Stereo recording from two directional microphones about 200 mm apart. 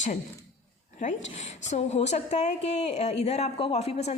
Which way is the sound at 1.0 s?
40° left (ahead or behind).